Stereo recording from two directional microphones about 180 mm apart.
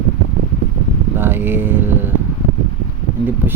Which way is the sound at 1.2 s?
10° right (ahead or behind).